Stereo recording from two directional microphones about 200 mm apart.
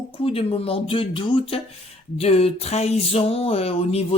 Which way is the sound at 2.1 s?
30° left (ahead or behind).